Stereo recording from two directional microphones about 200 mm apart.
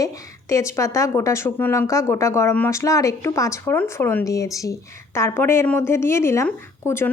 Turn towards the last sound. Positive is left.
turn(degrees=15)  # may be behind; listen again after turning